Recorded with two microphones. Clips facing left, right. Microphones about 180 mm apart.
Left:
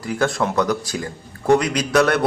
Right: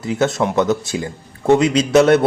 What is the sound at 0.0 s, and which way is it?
Speech, 20° right (ahead or behind).